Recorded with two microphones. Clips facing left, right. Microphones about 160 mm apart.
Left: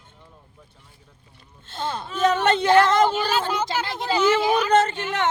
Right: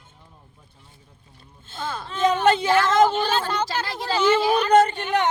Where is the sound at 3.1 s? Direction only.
10° left (ahead or behind).